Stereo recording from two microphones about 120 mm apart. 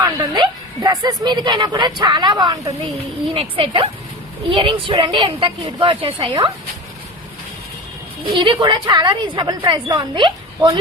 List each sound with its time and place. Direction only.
0.0 s a woman's voice: 30° right (ahead or behind)
3.2 s a woman's voice: 50° right (ahead or behind)
8.3 s a woman's voice: 40° right (ahead or behind)